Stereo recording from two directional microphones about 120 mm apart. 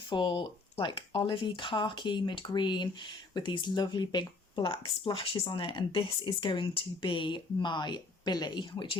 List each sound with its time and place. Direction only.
0.1 s speech: 40° left (ahead or behind)